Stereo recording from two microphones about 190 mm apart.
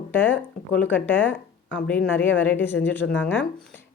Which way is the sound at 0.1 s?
10° left (ahead or behind).